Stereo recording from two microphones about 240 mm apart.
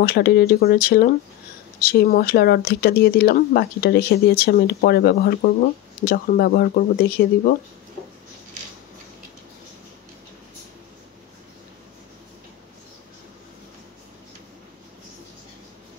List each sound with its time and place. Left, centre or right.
0.0 s speech: left